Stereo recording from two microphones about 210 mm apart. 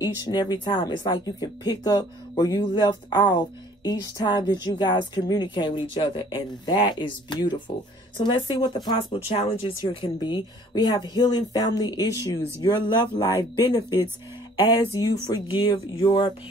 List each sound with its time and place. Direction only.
0.0 s speech: 20° left (ahead or behind)
15.0 s speech: 15° left (ahead or behind)